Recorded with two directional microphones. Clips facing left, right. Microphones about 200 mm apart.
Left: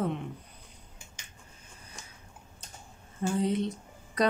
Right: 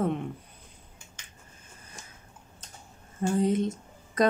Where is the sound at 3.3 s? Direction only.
45° right (ahead or behind).